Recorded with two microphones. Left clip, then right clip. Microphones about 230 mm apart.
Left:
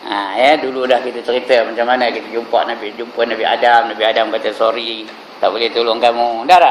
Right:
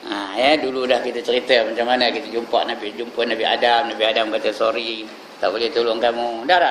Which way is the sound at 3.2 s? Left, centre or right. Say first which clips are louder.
Left 4 dB; right.